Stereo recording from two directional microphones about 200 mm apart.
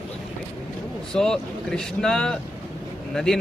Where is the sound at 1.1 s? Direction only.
5° left (ahead or behind).